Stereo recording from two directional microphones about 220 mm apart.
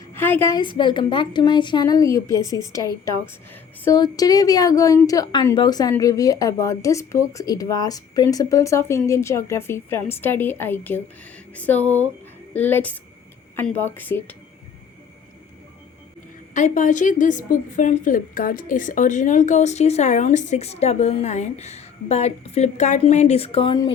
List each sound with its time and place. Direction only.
0.1 s a woman's voice: 10° left (ahead or behind)
16.6 s a woman's voice: 35° left (ahead or behind); by 23.9 s 20° left (ahead or behind)